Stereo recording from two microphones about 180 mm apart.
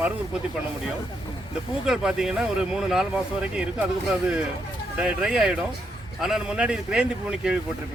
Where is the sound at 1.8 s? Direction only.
Centre (ahead or behind).